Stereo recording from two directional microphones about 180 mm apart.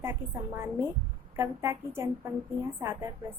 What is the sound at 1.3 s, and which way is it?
Female singing, 15° right (ahead or behind).